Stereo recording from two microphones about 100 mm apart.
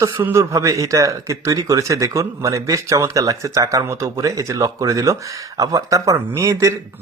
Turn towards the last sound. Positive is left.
turn(degrees=-30)  # may be behind; listen again after turning